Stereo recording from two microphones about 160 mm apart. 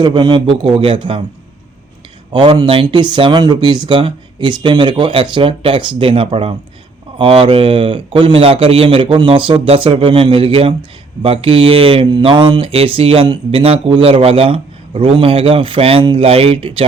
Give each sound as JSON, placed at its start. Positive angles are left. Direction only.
{"t": 0.0, "sound": "speech", "side_deg": -30}
{"t": 2.3, "sound": "speech", "side_deg": -30}